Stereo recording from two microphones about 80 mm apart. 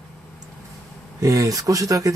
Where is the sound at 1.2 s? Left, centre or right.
Right.